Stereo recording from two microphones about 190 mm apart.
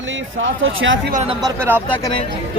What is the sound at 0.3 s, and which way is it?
Speech, 90° right.